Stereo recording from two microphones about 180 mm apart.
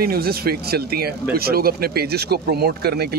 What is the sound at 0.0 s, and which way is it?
Speech, 55° right (ahead or behind).